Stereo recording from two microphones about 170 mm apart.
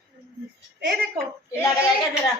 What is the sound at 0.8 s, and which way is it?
Speech, 75° right (ahead or behind).